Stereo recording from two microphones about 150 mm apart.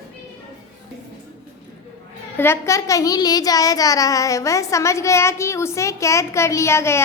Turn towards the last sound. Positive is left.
turn(degrees=15)  # may be behind; listen again after turning